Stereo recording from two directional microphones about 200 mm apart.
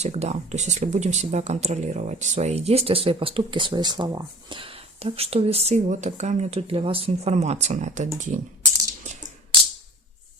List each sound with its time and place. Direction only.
0.0 s speech: 35° right (ahead or behind)